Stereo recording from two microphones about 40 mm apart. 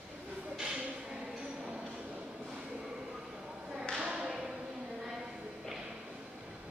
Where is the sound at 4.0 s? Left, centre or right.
Right.